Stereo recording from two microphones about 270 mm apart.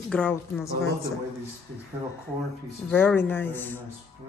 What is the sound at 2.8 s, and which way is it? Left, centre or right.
Speech, centre.